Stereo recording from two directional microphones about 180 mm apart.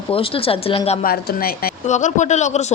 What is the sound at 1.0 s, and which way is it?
Speech, 55° left (ahead or behind).